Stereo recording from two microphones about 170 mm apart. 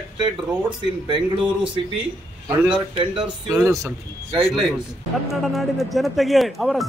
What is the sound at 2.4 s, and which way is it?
Speech, 15° right (ahead or behind).